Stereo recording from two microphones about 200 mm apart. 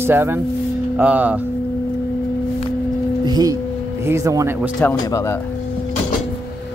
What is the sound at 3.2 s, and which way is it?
Tuning fork, 20° right (ahead or behind).